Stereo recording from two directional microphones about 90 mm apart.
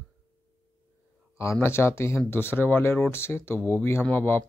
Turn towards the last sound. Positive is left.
turn(degrees=25)  # may be behind; listen again after turning